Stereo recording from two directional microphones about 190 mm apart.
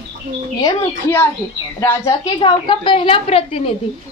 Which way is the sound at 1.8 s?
20° left (ahead or behind).